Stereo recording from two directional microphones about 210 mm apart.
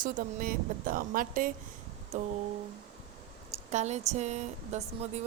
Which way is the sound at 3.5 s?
30° right (ahead or behind).